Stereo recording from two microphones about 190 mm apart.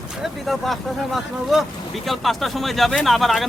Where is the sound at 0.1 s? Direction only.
Centre (ahead or behind).